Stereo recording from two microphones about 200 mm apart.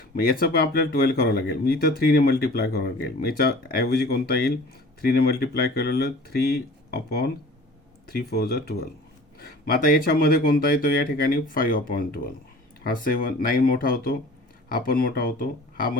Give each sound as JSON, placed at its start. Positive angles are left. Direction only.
{"t": 0.2, "sound": "speech", "side_deg": 50}